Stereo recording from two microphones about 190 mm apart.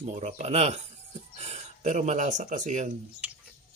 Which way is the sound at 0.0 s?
35° right (ahead or behind).